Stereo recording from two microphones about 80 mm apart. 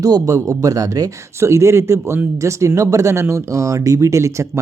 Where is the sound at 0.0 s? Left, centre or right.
Right.